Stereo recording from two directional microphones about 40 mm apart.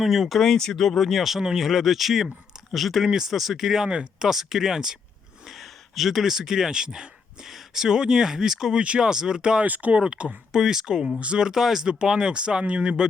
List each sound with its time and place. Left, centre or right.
0.0 s speech: centre
0.4 s speech: centre
3.8 s speech: right
4.3 s speech: centre
5.5 s speech: centre; by 9.6 s right
9.6 s speech: right
10.0 s speech: right
10.6 s speech: centre